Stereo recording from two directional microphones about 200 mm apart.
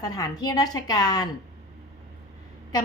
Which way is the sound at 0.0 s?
20° left (ahead or behind).